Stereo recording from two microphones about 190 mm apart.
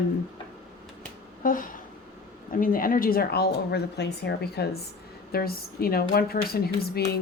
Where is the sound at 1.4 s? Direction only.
45° left (ahead or behind).